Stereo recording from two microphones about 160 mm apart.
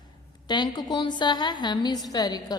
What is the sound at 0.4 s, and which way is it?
A woman's voice, 25° left (ahead or behind).